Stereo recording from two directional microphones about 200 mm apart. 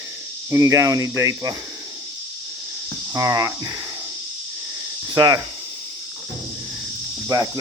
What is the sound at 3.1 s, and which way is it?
Speech, 15° right (ahead or behind).